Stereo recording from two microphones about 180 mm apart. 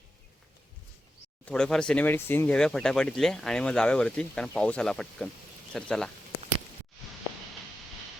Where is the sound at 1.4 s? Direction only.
5° left (ahead or behind).